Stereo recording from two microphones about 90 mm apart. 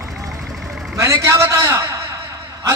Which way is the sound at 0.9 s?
35° right (ahead or behind).